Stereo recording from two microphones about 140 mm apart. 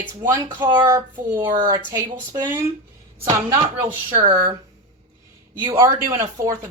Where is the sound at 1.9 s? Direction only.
15° right (ahead or behind).